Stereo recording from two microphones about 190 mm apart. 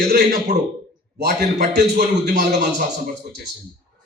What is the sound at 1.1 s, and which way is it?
A man's voice, 60° right (ahead or behind).